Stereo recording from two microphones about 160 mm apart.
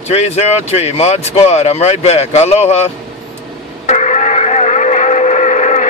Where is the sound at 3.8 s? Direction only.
45° left (ahead or behind).